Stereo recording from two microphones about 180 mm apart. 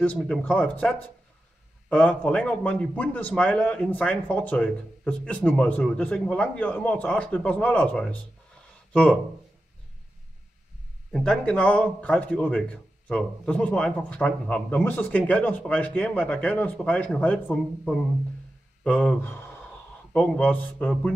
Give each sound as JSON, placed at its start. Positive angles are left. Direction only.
{"t": 0.0, "sound": "a man's voice", "side_deg": 5}
{"t": 11.1, "sound": "a man's voice", "side_deg": 5}